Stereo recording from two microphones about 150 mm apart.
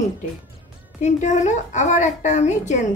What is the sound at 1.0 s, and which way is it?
A woman's voice, 50° left (ahead or behind).